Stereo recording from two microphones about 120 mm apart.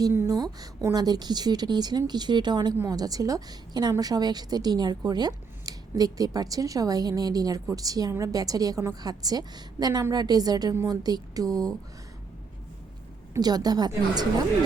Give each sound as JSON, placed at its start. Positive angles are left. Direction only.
{"t": 0.3, "sound": "a woman's voice", "side_deg": -30}
{"t": 13.4, "sound": "a woman's voice", "side_deg": -35}